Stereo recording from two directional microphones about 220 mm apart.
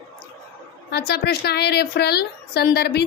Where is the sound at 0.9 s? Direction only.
45° left (ahead or behind).